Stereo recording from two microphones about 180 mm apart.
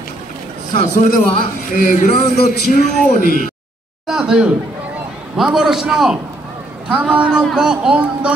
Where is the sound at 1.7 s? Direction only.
50° left (ahead or behind).